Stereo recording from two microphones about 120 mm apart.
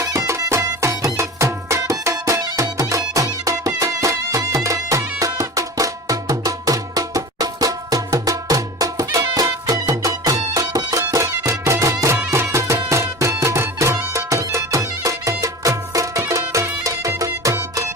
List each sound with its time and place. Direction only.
0.0 s music: 25° right (ahead or behind)